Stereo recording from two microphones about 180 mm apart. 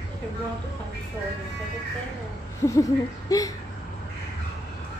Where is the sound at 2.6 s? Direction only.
15° left (ahead or behind).